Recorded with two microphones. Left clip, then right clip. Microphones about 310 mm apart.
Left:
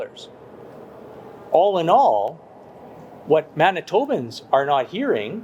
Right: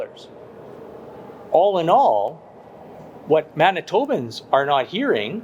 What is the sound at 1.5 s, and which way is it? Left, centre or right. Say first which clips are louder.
Speech: even; left.